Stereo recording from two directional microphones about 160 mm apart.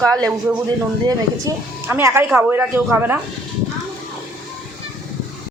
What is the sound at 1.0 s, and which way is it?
Speech, 20° right (ahead or behind).